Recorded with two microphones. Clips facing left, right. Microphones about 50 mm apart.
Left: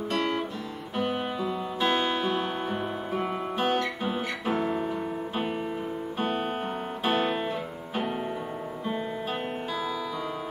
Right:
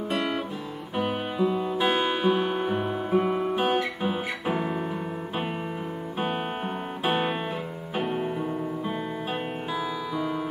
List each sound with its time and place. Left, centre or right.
0.9 s music: centre
7.1 s music: centre